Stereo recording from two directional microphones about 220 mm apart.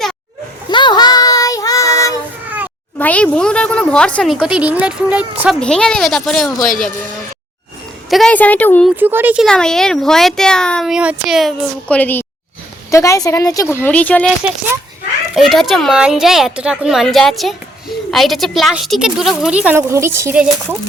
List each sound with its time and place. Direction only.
0.7 s child singing: 20° left (ahead or behind)
3.0 s a woman's voice: 5° left (ahead or behind)
8.1 s a woman's voice: 5° left (ahead or behind)
9.0 s a woman's voice: 10° right (ahead or behind)
15.4 s a woman's voice: centre (ahead or behind)